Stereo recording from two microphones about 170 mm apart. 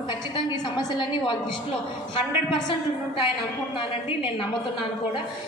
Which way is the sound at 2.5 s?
30° left (ahead or behind).